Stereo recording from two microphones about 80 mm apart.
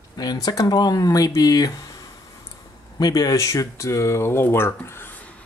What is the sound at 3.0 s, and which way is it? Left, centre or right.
Speech, left.